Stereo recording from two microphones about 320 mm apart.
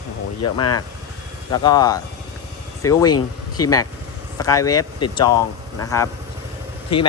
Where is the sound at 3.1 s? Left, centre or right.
Left.